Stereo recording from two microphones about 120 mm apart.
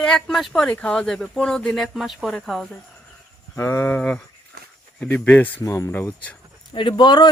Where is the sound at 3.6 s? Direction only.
20° left (ahead or behind).